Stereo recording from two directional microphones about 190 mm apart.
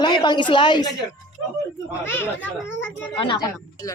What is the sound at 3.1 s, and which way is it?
Speech, 25° left (ahead or behind).